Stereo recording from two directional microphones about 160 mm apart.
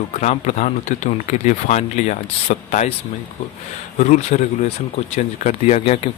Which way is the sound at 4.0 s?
45° left (ahead or behind).